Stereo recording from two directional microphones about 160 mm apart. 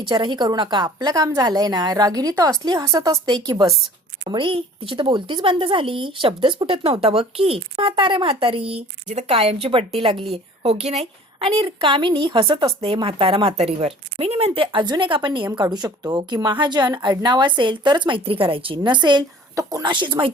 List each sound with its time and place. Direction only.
0.0 s a woman's voice: 30° right (ahead or behind)